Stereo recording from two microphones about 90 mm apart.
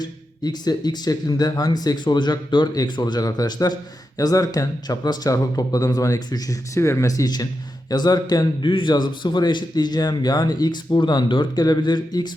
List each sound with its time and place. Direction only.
0.0 s a man's voice: 50° left (ahead or behind)
6.7 s speech: 35° left (ahead or behind)
7.9 s a man's voice: 50° left (ahead or behind)